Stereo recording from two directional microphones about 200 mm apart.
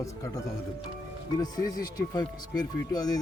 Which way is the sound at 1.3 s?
20° left (ahead or behind).